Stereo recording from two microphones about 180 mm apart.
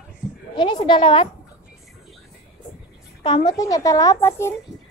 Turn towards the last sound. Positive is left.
turn(degrees=15)  # may be behind; listen again after turning